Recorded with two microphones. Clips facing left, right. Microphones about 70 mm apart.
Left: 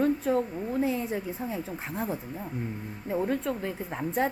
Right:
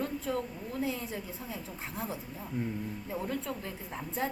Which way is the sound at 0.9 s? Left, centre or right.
Left.